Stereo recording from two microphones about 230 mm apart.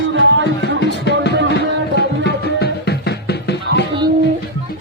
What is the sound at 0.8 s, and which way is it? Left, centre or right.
Music, left.